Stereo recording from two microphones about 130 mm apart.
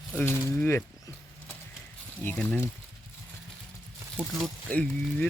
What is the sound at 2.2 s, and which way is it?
Speech, 10° left (ahead or behind).